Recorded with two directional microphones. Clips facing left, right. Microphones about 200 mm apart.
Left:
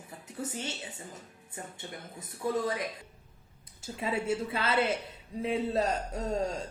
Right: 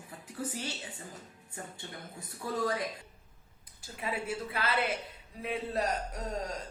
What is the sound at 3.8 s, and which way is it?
Speech, 25° left (ahead or behind).